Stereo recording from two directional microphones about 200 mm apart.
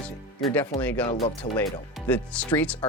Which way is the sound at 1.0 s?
30° left (ahead or behind).